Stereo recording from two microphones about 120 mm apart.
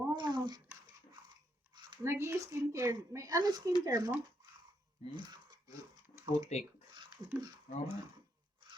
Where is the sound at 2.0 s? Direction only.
20° right (ahead or behind).